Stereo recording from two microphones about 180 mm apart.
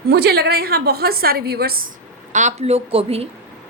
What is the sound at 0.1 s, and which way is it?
A woman's voice, 65° right (ahead or behind).